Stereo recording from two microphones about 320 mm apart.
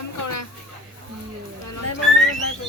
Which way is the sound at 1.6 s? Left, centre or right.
Left.